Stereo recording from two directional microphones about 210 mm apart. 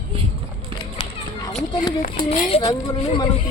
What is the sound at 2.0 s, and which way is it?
Speech, 40° left (ahead or behind).